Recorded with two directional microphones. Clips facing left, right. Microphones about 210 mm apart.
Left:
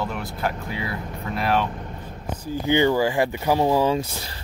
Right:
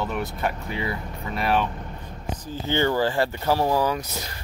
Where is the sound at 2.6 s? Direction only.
15° left (ahead or behind).